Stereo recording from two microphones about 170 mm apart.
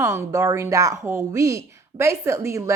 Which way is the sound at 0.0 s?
15° right (ahead or behind).